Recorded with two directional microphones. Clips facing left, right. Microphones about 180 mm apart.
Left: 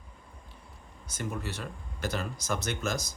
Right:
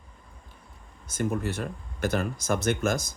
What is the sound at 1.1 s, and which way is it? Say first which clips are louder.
Speech: right 7 dB; 50° right (ahead or behind).